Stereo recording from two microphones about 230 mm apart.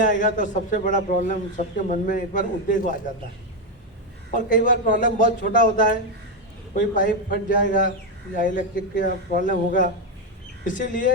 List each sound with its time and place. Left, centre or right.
0.0 s a man's voice: left
4.4 s a man's voice: left